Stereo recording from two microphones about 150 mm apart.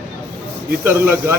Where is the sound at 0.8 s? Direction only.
15° right (ahead or behind).